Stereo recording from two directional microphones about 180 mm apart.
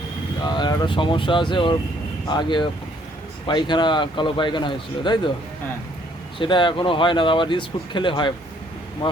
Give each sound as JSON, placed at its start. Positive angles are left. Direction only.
{"t": 0.4, "sound": "speech", "side_deg": 25}
{"t": 6.4, "sound": "speech", "side_deg": 25}